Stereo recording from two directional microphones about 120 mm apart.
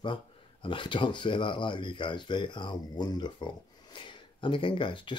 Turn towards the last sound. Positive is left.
turn(degrees=45)  # may be behind; listen again after turning